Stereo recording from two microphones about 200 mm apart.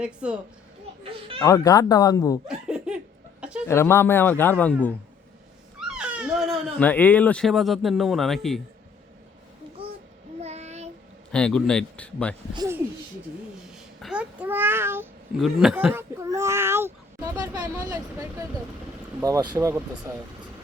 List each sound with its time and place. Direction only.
0.0 s speech: 5° right (ahead or behind)
1.4 s speech: 15° left (ahead or behind)
2.5 s laughter: 5° right (ahead or behind)
3.7 s speech: 15° left (ahead or behind)
5.9 s speech: 5° right (ahead or behind)
10.4 s child singing: 35° right (ahead or behind)
11.3 s speech: 5° left (ahead or behind)
14.0 s speech: 5° right (ahead or behind)